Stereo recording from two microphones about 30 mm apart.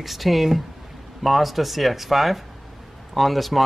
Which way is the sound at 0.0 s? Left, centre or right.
Centre.